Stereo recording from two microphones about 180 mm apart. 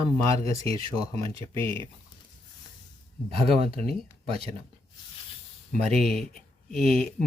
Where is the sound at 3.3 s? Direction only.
35° right (ahead or behind).